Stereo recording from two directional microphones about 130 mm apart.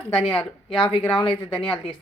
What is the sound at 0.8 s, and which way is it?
Speech, 45° left (ahead or behind).